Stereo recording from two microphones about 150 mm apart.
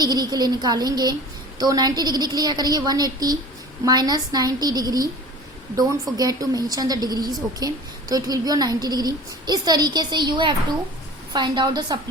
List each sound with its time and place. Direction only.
0.0 s a woman's voice: 30° right (ahead or behind)
6.1 s a woman's voice: 25° right (ahead or behind)